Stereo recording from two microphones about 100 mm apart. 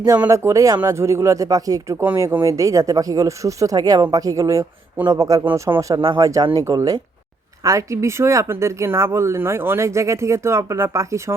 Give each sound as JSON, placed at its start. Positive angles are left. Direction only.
{"t": 0.3, "sound": "speech", "side_deg": -30}
{"t": 5.5, "sound": "speech", "side_deg": -25}